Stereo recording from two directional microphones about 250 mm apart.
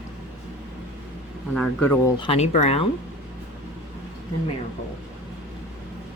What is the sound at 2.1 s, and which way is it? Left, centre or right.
Speech, left.